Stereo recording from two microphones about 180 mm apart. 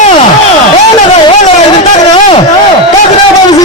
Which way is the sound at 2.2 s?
30° left (ahead or behind).